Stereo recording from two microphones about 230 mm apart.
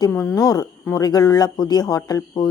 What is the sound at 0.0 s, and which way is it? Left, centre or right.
Speech, centre.